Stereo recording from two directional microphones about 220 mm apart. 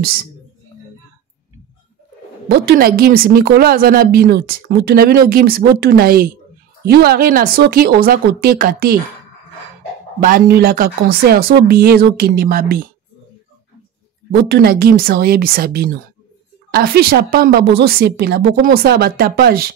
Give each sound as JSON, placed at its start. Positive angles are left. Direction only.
{"t": 2.4, "sound": "a woman's voice", "side_deg": -45}
{"t": 10.2, "sound": "a woman's voice", "side_deg": -40}
{"t": 14.3, "sound": "a woman's voice", "side_deg": -45}